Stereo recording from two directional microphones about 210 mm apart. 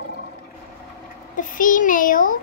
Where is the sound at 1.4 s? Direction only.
40° left (ahead or behind).